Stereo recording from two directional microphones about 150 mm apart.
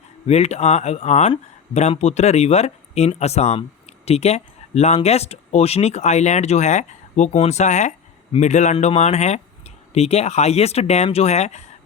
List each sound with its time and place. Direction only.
0.3 s speech: 45° left (ahead or behind)